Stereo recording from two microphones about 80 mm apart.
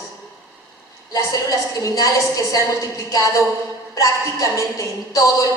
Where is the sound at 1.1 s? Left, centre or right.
Left.